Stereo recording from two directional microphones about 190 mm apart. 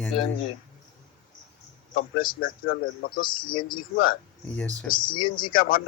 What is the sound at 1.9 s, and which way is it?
Speech, 50° left (ahead or behind).